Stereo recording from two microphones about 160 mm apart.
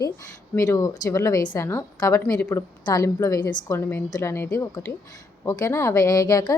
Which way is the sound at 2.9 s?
20° left (ahead or behind).